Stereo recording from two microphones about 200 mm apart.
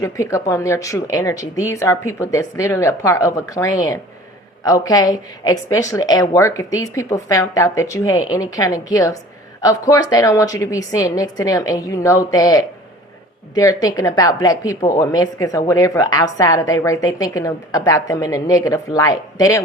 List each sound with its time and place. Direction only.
0.0 s a woman's voice: 15° left (ahead or behind)